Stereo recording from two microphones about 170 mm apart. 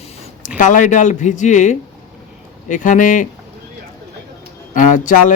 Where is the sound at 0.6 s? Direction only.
50° left (ahead or behind).